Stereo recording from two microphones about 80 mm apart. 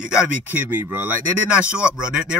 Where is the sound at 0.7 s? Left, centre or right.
Right.